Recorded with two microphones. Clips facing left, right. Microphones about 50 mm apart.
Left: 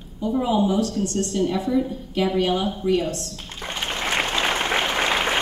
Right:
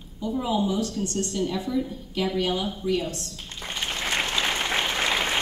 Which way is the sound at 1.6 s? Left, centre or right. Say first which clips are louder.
Left 6 dB; left.